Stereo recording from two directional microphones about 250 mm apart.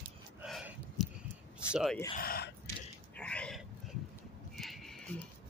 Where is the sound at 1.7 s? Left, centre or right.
Centre.